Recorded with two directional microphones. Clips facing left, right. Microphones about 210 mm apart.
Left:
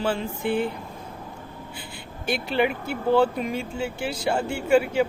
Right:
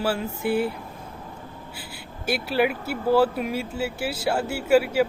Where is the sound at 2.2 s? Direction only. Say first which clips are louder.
Right 1 dB; 5° right (ahead or behind).